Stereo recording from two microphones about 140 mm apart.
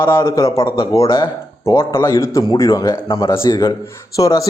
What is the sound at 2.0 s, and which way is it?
A man's voice, 25° left (ahead or behind).